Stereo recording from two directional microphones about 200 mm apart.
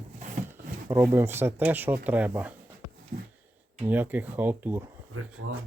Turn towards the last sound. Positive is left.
turn(degrees=-90)